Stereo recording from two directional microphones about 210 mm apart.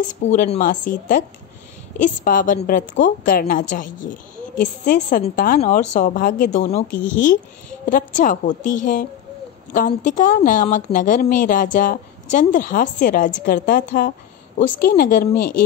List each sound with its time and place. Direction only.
0.2 s a woman's voice: 35° left (ahead or behind)